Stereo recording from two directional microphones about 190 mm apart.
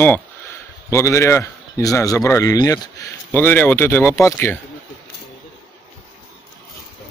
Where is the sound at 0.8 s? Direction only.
15° left (ahead or behind).